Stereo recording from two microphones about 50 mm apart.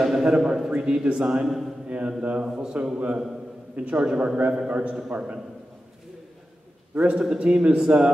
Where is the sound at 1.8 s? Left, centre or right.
Right.